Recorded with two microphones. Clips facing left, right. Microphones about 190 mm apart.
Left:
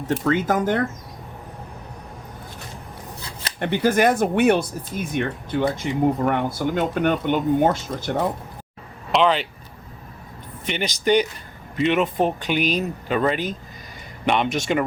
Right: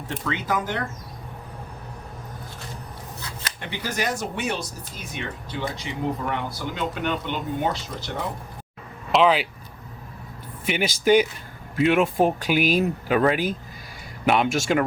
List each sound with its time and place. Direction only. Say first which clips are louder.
0.3 s speech: left 6 dB; 45° left (ahead or behind)
3.6 s speech: left 11 dB; 55° left (ahead or behind)
9.1 s speech: even; 5° right (ahead or behind)
10.7 s speech: right 1 dB; 5° right (ahead or behind)